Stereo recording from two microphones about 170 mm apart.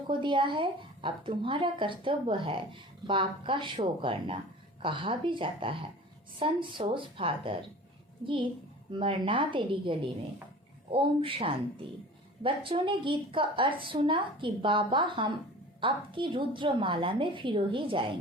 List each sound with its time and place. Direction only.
0.1 s a woman's voice: 30° right (ahead or behind)